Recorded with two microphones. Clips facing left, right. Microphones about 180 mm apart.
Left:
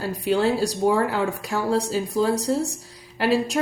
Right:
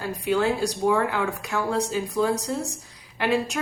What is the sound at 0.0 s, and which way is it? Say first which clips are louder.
A woman's voice: left 2 dB; 35° left (ahead or behind).